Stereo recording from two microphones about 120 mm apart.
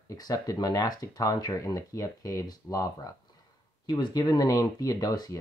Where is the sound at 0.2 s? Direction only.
30° left (ahead or behind).